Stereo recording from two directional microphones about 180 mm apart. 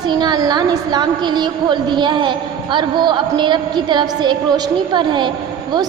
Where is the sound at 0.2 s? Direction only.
20° right (ahead or behind).